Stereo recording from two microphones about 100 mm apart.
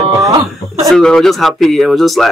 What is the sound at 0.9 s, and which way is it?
Speech, 5° left (ahead or behind).